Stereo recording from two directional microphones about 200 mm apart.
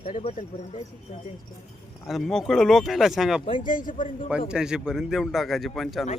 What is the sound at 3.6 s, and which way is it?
Speech, 45° left (ahead or behind).